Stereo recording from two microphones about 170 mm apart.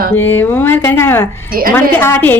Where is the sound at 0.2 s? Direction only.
10° left (ahead or behind).